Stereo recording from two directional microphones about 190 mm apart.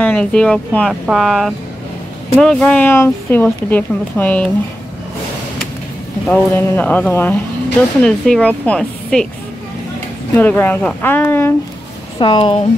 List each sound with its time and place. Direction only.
0.0 s speech: 5° left (ahead or behind)
6.2 s speech: 10° left (ahead or behind)
10.3 s speech: 10° left (ahead or behind)
12.2 s speech: 25° left (ahead or behind)